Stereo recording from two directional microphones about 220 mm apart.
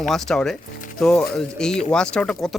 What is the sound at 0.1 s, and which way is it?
Speech, centre (ahead or behind).